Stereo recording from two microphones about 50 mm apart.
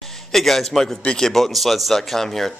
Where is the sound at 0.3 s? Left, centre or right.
Centre.